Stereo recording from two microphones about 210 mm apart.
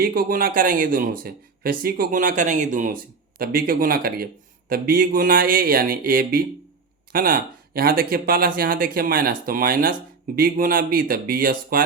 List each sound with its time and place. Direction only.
0.0 s speech: 45° right (ahead or behind)